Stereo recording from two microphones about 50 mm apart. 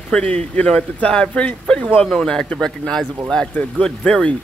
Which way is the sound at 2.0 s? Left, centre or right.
Centre.